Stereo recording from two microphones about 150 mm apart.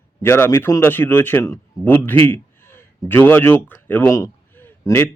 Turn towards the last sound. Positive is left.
turn(degrees=15)  # may be behind; listen again after turning